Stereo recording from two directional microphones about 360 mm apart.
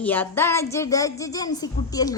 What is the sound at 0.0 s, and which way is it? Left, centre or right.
Speech, centre.